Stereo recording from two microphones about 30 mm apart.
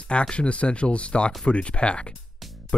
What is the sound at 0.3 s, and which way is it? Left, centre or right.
Speech, left.